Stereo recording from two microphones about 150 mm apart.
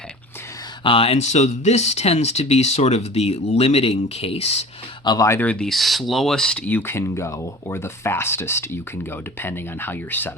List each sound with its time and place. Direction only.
0.9 s speech: 40° left (ahead or behind)
5.0 s speech: 20° left (ahead or behind)